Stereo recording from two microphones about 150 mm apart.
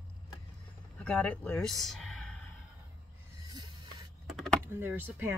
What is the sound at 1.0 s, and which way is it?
Speech, 5° left (ahead or behind).